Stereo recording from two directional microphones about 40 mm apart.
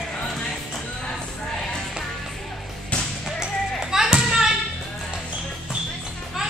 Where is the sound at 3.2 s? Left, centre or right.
Centre.